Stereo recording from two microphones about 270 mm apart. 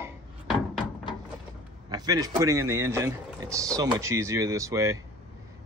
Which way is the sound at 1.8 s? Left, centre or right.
Centre.